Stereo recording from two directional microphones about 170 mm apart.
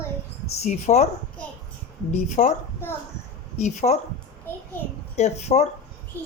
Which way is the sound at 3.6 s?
45° left (ahead or behind).